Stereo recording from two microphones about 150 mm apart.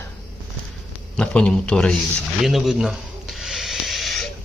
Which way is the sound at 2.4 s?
Centre (ahead or behind).